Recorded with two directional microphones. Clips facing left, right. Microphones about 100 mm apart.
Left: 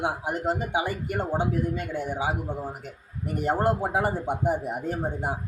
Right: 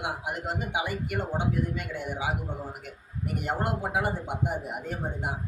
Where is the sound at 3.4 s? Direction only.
35° left (ahead or behind).